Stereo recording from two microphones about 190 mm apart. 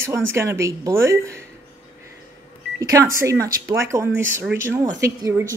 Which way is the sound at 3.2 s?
15° right (ahead or behind).